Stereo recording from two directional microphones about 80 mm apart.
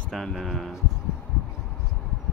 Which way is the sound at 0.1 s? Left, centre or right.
Centre.